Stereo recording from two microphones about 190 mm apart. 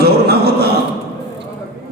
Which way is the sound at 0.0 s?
55° right (ahead or behind).